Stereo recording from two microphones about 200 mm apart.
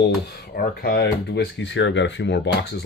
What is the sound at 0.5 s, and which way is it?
Speech, 50° left (ahead or behind).